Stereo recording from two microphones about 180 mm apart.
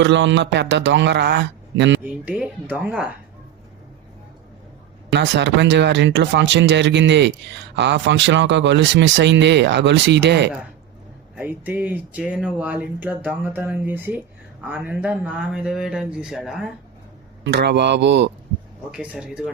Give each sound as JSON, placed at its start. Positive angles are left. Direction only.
{"t": 0.0, "sound": "speech", "side_deg": -85}
{"t": 2.0, "sound": "speech", "side_deg": -5}
{"t": 5.1, "sound": "speech", "side_deg": -85}
{"t": 11.3, "sound": "speech", "side_deg": -10}
{"t": 17.4, "sound": "speech", "side_deg": -70}
{"t": 18.9, "sound": "speech", "side_deg": -5}